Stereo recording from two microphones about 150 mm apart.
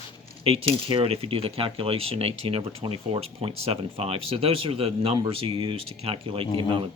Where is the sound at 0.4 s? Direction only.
40° right (ahead or behind).